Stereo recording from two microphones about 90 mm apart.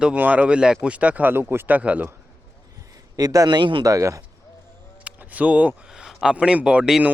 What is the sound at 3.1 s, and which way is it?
Speech, 40° right (ahead or behind).